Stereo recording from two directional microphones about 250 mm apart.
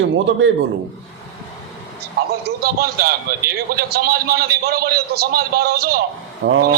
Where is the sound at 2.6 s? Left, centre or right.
Right.